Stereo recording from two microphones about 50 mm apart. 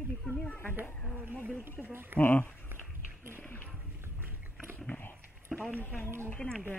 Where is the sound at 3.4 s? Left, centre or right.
Left.